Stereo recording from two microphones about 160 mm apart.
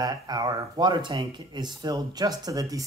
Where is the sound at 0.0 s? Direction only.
25° right (ahead or behind).